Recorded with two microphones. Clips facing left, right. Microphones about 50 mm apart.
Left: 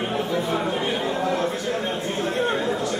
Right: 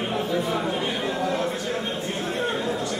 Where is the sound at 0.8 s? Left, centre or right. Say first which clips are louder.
Left 2 dB; left.